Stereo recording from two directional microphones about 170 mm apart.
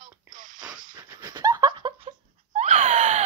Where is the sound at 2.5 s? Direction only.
40° right (ahead or behind).